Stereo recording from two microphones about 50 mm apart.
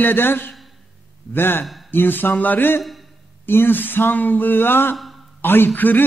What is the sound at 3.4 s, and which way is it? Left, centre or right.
Speech, left.